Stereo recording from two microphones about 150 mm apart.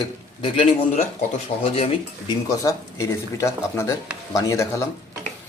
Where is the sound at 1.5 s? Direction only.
45° left (ahead or behind).